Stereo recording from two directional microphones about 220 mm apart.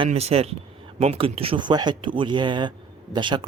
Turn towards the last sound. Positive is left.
turn(degrees=-20)  # may be behind; listen again after turning